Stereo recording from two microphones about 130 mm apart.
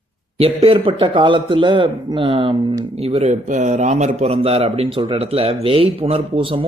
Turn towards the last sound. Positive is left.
turn(degrees=-45)  # may be behind; listen again after turning